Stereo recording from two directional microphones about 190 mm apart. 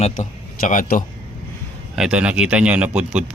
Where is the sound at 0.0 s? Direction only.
40° left (ahead or behind).